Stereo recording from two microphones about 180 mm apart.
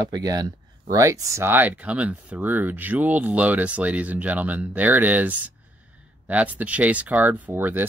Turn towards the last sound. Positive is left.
turn(degrees=-10)  # may be behind; listen again after turning